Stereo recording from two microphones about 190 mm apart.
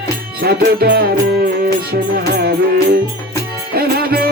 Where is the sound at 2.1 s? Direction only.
60° right (ahead or behind).